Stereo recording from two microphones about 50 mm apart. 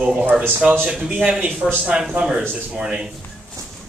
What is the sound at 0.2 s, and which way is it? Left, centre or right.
A man's voice, right.